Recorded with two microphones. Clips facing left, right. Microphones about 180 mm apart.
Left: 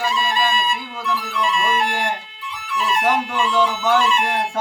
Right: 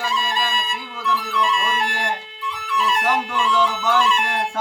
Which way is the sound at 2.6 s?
5° left (ahead or behind).